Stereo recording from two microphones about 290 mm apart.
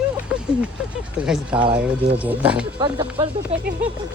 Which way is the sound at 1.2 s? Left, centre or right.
Centre.